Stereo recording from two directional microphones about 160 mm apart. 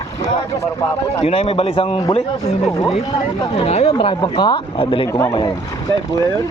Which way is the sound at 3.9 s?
30° left (ahead or behind).